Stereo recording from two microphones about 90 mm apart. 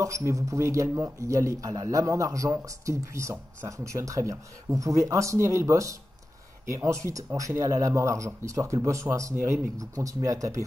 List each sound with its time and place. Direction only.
0.0 s a man's voice: 35° right (ahead or behind)